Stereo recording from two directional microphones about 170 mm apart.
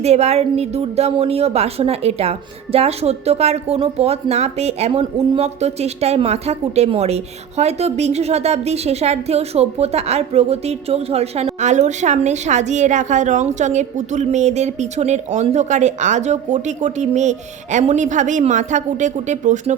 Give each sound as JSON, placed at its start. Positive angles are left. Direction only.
{"t": 0.0, "sound": "a woman's voice", "side_deg": -40}